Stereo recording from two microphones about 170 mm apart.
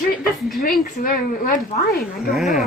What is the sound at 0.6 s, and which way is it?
Speech, 55° left (ahead or behind).